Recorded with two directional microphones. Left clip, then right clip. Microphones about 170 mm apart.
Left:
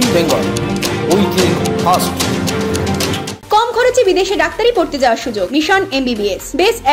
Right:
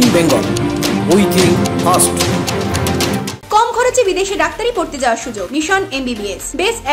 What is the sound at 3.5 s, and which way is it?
Speech, 15° left (ahead or behind).